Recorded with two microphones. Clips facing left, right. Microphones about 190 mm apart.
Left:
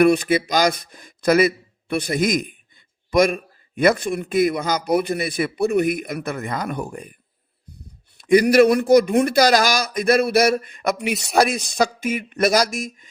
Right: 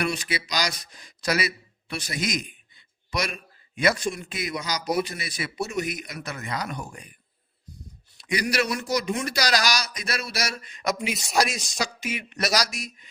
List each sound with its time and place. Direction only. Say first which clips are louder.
0.0 s speech: left 13 dB; 55° left (ahead or behind)
8.2 s speech: left 13 dB; 50° left (ahead or behind)